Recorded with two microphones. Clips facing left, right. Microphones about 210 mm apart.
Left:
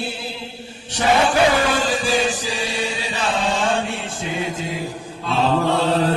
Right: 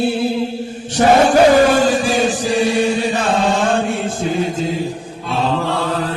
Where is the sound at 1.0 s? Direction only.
45° right (ahead or behind).